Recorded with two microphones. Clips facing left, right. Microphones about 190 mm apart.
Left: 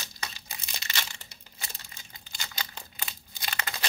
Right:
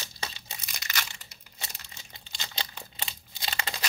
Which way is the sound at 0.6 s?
25° left (ahead or behind).